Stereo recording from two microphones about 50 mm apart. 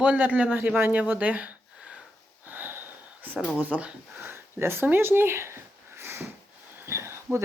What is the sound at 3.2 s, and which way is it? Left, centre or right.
Speech, right.